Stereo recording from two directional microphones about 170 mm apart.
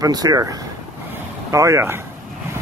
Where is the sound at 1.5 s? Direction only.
15° right (ahead or behind).